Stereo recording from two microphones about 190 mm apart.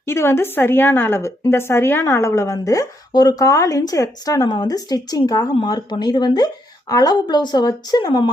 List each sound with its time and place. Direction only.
0.0 s a woman's voice: 15° left (ahead or behind)